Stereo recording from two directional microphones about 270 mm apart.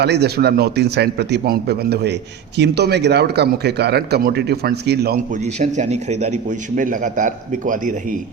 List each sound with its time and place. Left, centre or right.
0.0 s speech: right